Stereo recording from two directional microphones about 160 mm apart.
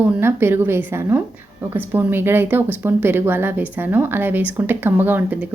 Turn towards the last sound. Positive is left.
turn(degrees=-10)  # may be behind; listen again after turning